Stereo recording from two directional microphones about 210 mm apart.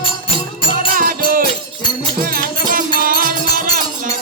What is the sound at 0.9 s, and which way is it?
Music, 40° right (ahead or behind).